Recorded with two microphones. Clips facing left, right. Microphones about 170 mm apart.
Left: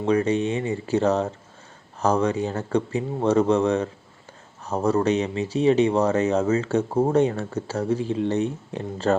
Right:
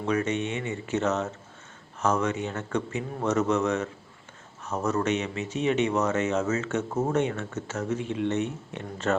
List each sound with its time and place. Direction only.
0.0 s speech: 30° left (ahead or behind)